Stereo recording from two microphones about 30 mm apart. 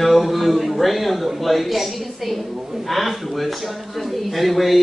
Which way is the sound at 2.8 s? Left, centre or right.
Centre.